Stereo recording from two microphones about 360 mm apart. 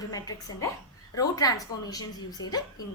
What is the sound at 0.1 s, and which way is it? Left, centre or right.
A woman's voice, centre.